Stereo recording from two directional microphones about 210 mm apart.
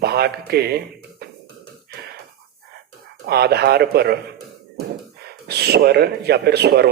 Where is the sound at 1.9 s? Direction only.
50° right (ahead or behind).